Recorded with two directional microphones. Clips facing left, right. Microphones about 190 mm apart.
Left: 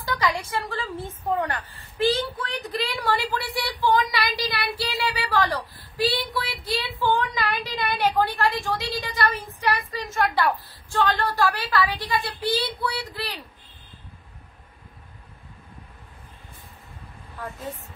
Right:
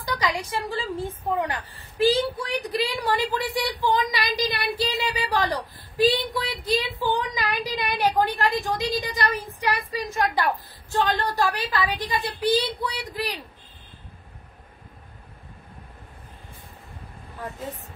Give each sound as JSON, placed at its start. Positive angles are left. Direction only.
{"t": 0.0, "sound": "a woman's voice", "side_deg": -15}